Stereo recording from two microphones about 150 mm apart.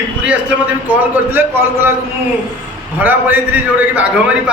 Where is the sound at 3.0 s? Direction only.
10° right (ahead or behind).